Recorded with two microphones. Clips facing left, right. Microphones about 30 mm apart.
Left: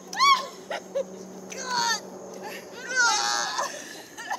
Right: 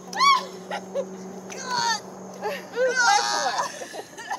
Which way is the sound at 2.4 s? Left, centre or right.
Right.